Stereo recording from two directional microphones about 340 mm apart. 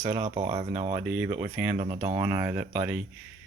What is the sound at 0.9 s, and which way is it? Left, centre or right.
Speech, centre.